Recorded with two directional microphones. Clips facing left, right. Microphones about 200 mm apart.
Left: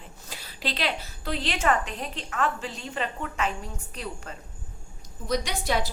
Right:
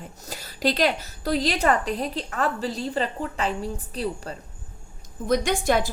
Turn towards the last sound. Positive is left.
turn(degrees=-50)  # may be behind; listen again after turning